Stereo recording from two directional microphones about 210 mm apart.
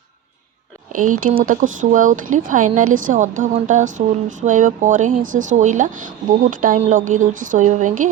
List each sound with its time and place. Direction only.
1.2 s speech: 40° right (ahead or behind)